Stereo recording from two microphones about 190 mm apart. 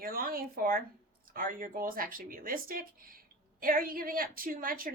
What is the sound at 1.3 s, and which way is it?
A woman's voice, 45° right (ahead or behind).